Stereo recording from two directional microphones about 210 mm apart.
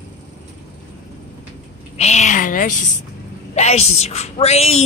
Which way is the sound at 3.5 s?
30° left (ahead or behind).